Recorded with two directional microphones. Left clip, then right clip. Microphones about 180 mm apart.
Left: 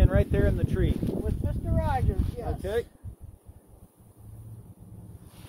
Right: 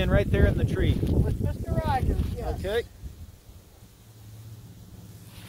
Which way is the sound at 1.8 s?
30° left (ahead or behind).